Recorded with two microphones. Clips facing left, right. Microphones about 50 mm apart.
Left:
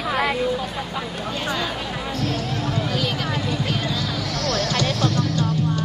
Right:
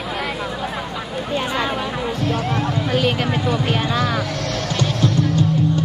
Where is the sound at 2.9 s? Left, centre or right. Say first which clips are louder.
Right 5 dB; right.